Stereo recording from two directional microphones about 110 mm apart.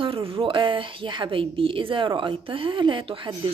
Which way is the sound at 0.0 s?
55° right (ahead or behind).